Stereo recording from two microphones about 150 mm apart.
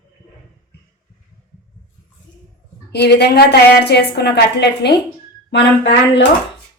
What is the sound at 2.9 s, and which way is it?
A woman's voice, 90° left.